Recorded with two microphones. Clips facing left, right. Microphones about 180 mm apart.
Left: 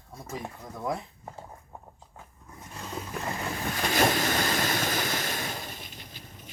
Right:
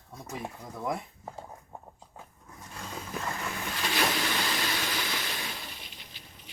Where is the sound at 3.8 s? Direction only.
45° left (ahead or behind).